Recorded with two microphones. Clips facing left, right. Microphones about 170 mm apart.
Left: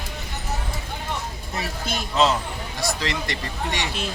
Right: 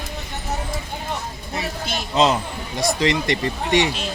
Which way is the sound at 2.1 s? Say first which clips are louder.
Right 3 dB; 20° right (ahead or behind).